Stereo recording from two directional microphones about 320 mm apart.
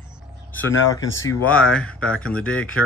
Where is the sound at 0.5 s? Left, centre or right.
Centre.